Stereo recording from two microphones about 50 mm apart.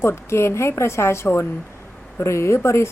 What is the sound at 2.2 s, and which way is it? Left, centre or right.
Speech, left.